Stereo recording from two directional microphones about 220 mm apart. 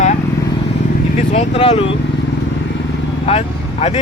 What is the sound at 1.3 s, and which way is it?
Speech, 25° left (ahead or behind).